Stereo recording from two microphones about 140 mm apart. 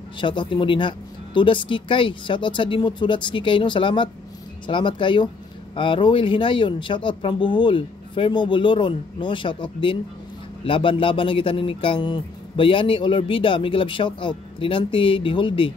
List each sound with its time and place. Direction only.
0.2 s a man's voice: 35° left (ahead or behind)